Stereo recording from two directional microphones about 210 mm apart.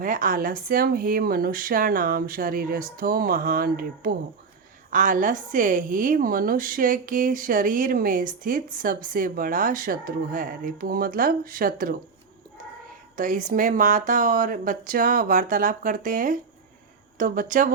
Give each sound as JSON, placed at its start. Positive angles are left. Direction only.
{"t": 0.0, "sound": "a woman's voice", "side_deg": -40}
{"t": 13.1, "sound": "a woman's voice", "side_deg": -40}